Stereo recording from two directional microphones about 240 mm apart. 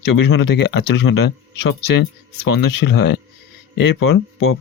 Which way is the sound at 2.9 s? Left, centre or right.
Left.